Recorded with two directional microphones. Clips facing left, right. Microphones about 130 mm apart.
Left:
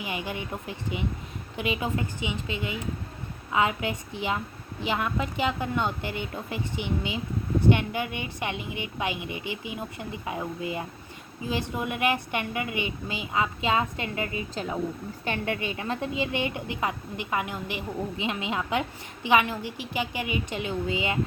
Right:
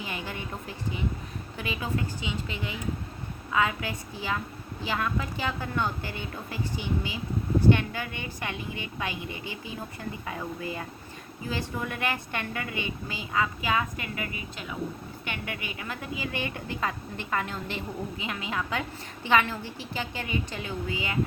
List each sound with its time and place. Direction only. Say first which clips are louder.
0.0 s a woman's voice: left 3 dB; 15° left (ahead or behind)